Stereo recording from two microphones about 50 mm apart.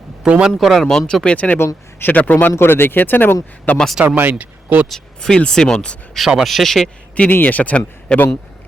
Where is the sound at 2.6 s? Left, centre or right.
Left.